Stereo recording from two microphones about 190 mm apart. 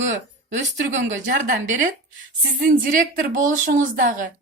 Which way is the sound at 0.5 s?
40° right (ahead or behind).